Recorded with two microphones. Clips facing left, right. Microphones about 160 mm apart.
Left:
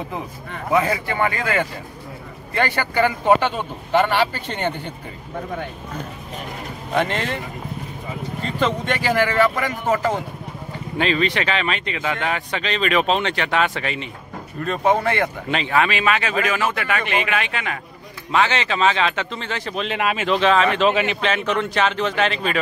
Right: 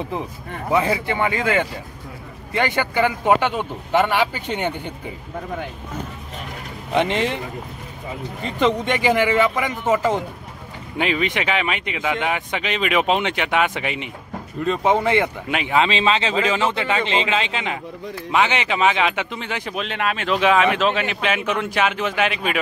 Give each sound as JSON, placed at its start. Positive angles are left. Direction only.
{"t": 0.8, "sound": "speech", "side_deg": -15}
{"t": 6.9, "sound": "speech", "side_deg": -15}
{"t": 8.5, "sound": "speech", "side_deg": -15}
{"t": 19.8, "sound": "speech", "side_deg": 5}
{"t": 20.3, "sound": "speech", "side_deg": -10}
{"t": 21.2, "sound": "speech", "side_deg": -10}